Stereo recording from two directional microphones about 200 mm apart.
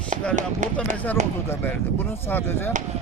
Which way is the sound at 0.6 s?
40° right (ahead or behind).